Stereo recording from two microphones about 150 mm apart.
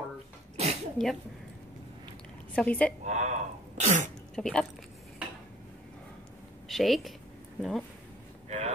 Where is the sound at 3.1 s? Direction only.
50° right (ahead or behind).